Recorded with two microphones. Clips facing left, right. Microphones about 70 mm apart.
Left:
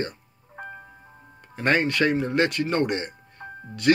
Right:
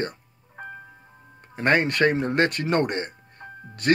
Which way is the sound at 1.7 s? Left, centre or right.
Right.